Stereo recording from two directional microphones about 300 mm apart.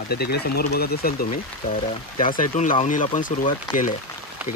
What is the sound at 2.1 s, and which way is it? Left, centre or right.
Speech, centre.